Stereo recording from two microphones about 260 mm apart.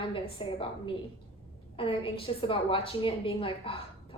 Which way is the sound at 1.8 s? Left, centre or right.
Left.